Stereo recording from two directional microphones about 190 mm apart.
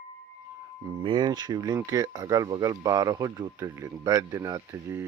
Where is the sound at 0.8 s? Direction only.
25° right (ahead or behind).